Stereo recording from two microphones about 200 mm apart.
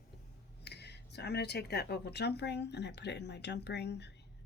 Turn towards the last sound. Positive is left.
turn(degrees=60)  # may be behind; listen again after turning